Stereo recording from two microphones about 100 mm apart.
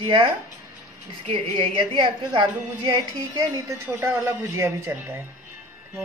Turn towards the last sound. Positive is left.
turn(degrees=-20)  # may be behind; listen again after turning